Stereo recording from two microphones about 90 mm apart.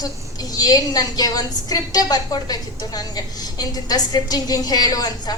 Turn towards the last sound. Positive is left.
turn(degrees=45)  # may be behind; listen again after turning